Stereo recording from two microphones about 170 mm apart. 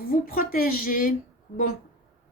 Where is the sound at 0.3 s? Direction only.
60° left (ahead or behind).